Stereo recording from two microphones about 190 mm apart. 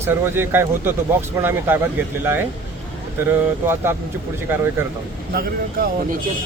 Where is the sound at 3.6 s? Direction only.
15° right (ahead or behind).